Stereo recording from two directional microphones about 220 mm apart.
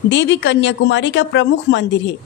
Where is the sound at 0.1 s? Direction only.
55° left (ahead or behind).